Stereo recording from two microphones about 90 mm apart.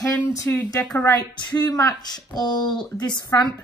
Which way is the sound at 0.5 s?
20° left (ahead or behind).